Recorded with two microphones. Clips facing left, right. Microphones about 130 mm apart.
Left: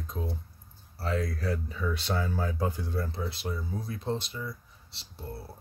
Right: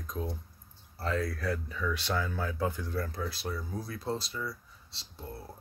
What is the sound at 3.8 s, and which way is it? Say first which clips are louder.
Speech: left 2 dB; 35° right (ahead or behind).